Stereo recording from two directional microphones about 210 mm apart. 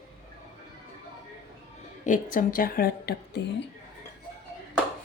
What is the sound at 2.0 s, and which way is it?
A woman's voice, 40° left (ahead or behind).